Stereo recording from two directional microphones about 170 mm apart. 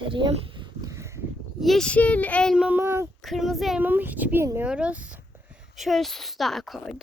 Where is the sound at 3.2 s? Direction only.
Centre (ahead or behind).